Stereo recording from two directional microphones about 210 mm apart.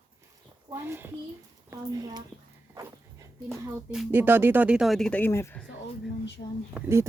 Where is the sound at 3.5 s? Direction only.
Centre (ahead or behind).